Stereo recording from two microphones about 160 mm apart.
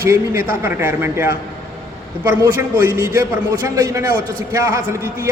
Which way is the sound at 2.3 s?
15° right (ahead or behind).